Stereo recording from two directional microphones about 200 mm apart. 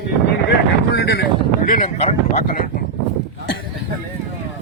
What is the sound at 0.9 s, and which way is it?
Speech, 50° left (ahead or behind).